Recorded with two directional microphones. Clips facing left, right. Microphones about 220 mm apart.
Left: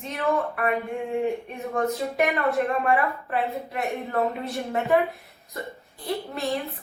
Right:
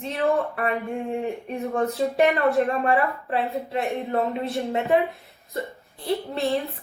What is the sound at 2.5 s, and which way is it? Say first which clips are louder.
Speech: right 2 dB; centre (ahead or behind).